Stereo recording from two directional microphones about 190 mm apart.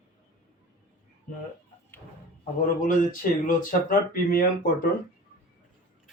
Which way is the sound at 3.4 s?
45° left (ahead or behind).